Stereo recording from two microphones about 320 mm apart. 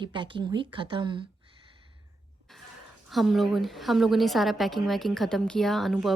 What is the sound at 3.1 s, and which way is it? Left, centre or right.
A woman's voice, centre.